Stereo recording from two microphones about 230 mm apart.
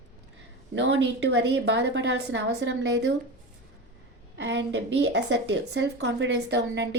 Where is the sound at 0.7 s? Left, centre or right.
Right.